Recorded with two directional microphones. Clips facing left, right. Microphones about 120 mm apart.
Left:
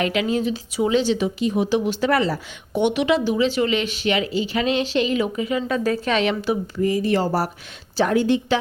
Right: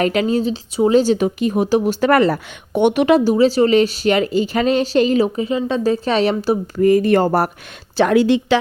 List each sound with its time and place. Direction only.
0.0 s speech: 40° right (ahead or behind)
6.7 s speech: 55° right (ahead or behind)
7.9 s a woman's voice: 90° right